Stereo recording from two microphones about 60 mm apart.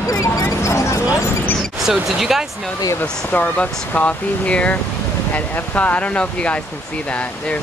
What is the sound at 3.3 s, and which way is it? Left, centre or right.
Speech, left.